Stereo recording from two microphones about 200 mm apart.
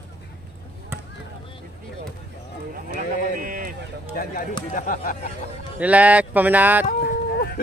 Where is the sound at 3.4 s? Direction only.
45° right (ahead or behind).